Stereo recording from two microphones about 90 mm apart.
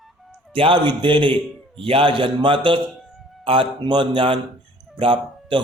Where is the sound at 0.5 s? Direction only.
70° right (ahead or behind).